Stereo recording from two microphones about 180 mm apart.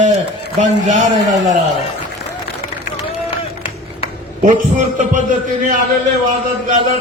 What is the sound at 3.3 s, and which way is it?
Run, 30° left (ahead or behind).